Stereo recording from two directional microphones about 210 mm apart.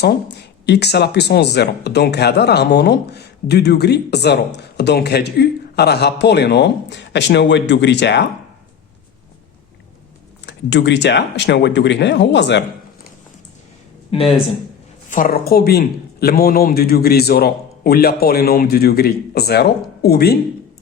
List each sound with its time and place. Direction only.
0.0 s a man's voice: 55° left (ahead or behind)
10.4 s a man's voice: 55° left (ahead or behind)
15.1 s a man's voice: 45° left (ahead or behind)